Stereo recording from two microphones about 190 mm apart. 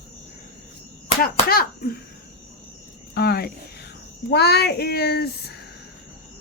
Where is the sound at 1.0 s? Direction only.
50° left (ahead or behind).